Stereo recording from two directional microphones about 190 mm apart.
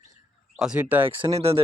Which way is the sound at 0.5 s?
5° right (ahead or behind).